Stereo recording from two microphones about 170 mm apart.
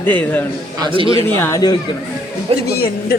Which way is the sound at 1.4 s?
20° left (ahead or behind).